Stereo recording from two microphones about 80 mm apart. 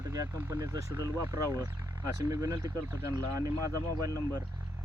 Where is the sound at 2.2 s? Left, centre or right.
Right.